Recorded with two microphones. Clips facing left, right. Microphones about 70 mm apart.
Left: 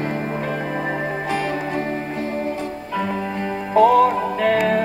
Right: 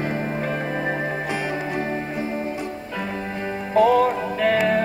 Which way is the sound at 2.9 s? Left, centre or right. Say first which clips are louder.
Left 6 dB; centre.